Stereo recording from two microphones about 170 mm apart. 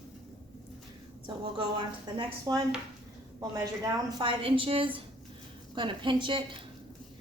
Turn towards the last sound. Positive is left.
turn(degrees=-30)  # may be behind; listen again after turning